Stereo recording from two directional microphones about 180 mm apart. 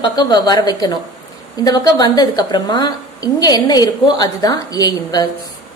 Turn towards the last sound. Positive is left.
turn(degrees=20)  # may be behind; listen again after turning